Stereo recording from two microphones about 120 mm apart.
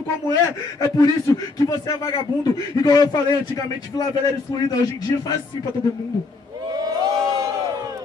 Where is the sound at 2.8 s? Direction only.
35° left (ahead or behind).